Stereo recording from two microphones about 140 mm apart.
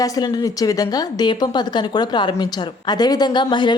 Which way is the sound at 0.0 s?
30° left (ahead or behind).